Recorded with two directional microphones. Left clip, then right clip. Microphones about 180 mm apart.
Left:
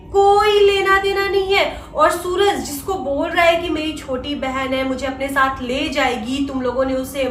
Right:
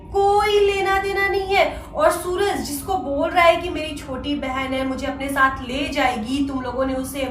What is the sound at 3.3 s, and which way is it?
A woman's voice, 15° left (ahead or behind).